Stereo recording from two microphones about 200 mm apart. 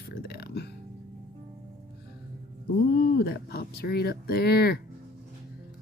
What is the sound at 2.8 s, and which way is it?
Speech, 50° left (ahead or behind).